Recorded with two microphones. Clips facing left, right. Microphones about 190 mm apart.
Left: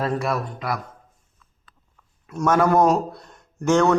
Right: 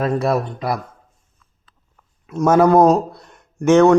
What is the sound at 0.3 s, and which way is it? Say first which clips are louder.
Speech: right 6 dB; 35° right (ahead or behind).